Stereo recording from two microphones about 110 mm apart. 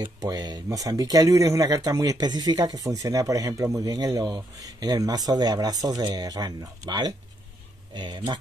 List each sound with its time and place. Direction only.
0.2 s speech: 35° right (ahead or behind)